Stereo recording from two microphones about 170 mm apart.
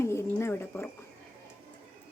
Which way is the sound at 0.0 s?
15° left (ahead or behind).